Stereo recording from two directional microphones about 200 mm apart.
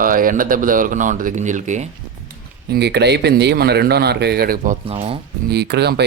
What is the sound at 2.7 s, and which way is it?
A man's voice, 55° right (ahead or behind).